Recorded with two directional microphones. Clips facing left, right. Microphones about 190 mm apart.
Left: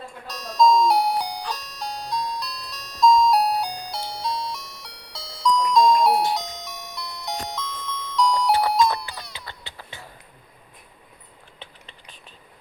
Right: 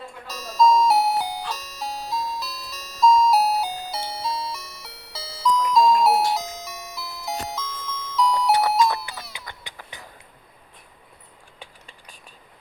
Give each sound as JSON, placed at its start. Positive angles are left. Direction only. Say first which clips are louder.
{"t": 0.3, "sound": "music", "louder": "even", "side_deg": -5}
{"t": 9.5, "sound": "music", "louder": "even", "side_deg": -15}
{"t": 11.6, "sound": "a sound", "louder": "even", "side_deg": -10}